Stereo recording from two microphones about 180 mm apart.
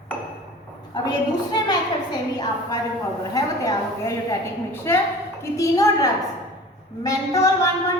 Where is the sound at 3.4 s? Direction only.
15° left (ahead or behind).